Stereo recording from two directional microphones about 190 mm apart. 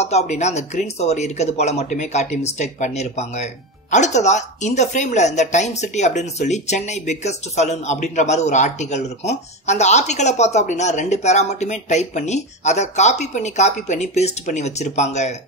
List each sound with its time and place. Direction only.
0.0 s speech: 35° left (ahead or behind)